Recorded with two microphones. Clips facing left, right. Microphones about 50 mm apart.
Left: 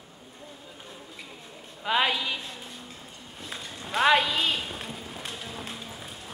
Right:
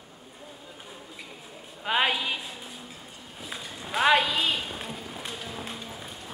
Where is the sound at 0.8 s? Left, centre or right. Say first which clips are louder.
Even; centre.